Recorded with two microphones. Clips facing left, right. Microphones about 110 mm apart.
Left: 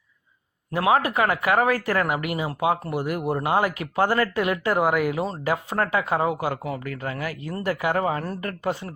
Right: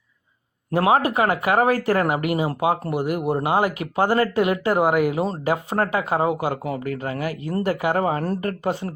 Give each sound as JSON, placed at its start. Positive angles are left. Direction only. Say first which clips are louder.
{"t": 0.7, "sound": "speech", "louder": "right 2 dB", "side_deg": -30}